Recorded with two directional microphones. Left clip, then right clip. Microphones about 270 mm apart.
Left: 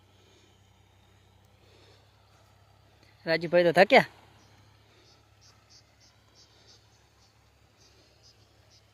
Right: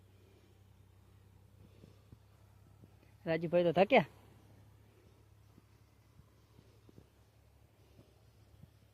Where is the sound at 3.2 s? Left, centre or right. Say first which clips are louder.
Left 8 dB; centre.